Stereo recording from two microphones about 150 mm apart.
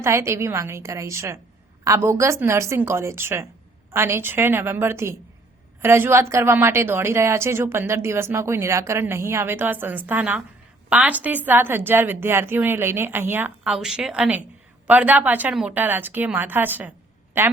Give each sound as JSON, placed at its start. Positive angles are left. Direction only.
{"t": 0.0, "sound": "speech", "side_deg": -20}
{"t": 13.7, "sound": "a woman's voice", "side_deg": -5}